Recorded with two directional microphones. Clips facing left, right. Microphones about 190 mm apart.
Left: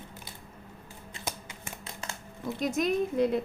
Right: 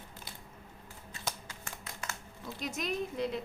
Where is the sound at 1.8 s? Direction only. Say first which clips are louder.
Left 2 dB; 30° left (ahead or behind).